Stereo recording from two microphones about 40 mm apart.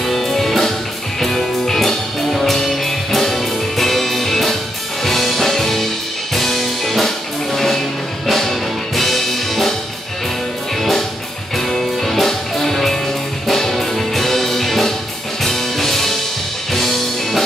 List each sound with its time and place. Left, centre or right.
0.0 s music: centre
10.8 s music: centre